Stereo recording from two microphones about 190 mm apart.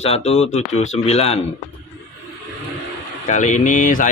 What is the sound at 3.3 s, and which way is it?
Speech, 40° left (ahead or behind).